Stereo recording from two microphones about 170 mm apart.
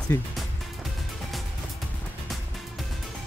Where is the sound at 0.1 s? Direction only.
15° left (ahead or behind).